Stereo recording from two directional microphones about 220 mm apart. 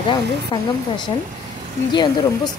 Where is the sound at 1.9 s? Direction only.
20° left (ahead or behind).